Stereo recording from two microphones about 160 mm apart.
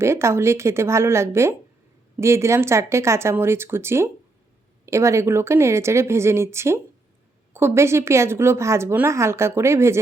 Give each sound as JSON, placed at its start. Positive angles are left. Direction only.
{"t": 0.0, "sound": "a woman's voice", "side_deg": -15}